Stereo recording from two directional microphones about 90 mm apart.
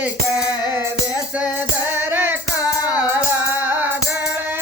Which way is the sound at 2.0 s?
25° right (ahead or behind).